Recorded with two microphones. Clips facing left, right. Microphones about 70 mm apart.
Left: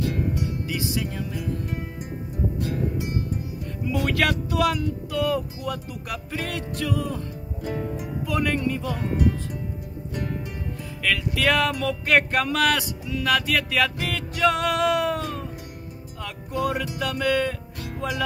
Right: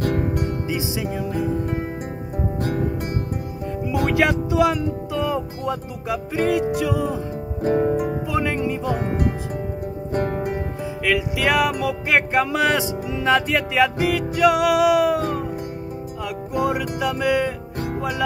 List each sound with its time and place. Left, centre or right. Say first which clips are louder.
0.0 s music: right 4 dB; right
0.7 s music: right 3 dB; centre
3.8 s speech: right 4 dB; centre
7.6 s music: right 11 dB; right
7.9 s music: right 10 dB; right
8.3 s music: right 2 dB; centre
10.1 s music: right 9 dB; right
11.1 s music: right 2 dB; centre
16.3 s music: right 4 dB; centre
17.7 s music: right 9 dB; right